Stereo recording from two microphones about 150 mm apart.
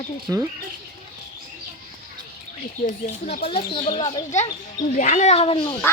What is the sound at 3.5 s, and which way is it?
Speech, 40° left (ahead or behind).